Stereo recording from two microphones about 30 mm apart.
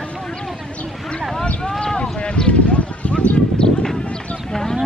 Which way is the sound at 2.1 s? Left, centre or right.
Left.